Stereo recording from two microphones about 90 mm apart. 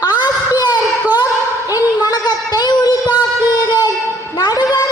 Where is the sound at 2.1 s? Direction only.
50° left (ahead or behind).